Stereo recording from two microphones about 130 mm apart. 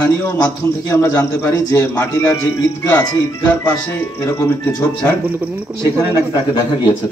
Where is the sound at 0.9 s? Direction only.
15° left (ahead or behind).